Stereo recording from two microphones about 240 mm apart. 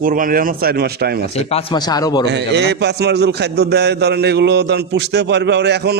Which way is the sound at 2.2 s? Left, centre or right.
Right.